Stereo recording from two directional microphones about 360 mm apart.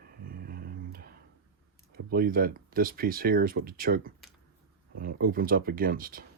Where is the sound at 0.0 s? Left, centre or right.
Right.